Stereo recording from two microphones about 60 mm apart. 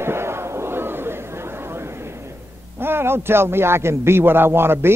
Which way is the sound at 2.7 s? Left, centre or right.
Right.